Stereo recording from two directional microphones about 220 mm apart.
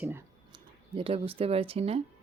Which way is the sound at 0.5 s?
25° right (ahead or behind).